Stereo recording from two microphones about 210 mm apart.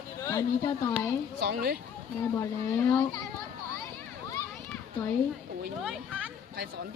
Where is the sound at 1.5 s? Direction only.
45° right (ahead or behind).